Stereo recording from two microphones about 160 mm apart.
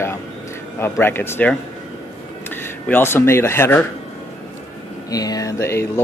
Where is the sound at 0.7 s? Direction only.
15° left (ahead or behind).